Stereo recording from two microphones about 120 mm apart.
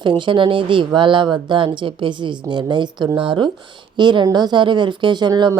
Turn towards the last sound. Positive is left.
turn(degrees=-35)  # may be behind; listen again after turning